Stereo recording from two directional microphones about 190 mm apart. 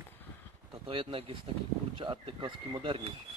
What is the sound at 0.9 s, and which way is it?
Speech, 25° right (ahead or behind).